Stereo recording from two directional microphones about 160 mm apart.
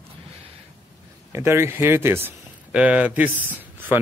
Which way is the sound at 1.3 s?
15° right (ahead or behind).